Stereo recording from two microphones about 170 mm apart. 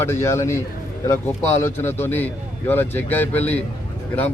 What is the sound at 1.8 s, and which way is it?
A man's voice, 15° left (ahead or behind).